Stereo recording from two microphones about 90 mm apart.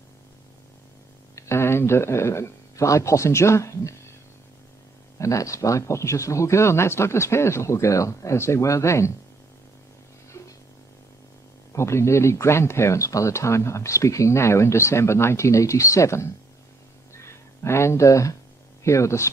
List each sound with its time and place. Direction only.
1.3 s speech: 30° left (ahead or behind)
5.2 s speech: 35° left (ahead or behind)
11.7 s speech: 30° left (ahead or behind)
17.2 s a sound: 30° left (ahead or behind)
18.9 s speech: 35° left (ahead or behind)